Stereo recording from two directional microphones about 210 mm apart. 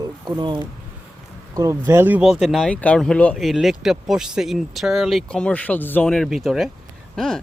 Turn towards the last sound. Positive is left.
turn(degrees=5)  # may be behind; listen again after turning